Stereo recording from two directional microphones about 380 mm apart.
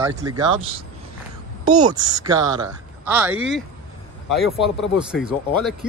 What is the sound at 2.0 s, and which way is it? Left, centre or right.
Speech, centre.